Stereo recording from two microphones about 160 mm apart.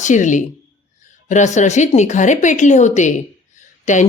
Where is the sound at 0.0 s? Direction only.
50° left (ahead or behind).